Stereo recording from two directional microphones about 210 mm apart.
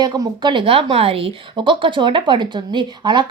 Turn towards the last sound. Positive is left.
turn(degrees=-20)  # may be behind; listen again after turning